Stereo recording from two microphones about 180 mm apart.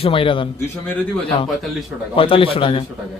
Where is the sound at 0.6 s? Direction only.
10° left (ahead or behind).